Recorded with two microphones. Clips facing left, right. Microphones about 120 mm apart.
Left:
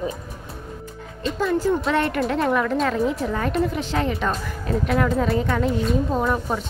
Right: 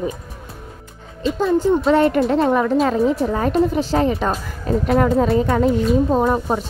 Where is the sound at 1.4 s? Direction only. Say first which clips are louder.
Right 5 dB; 25° right (ahead or behind).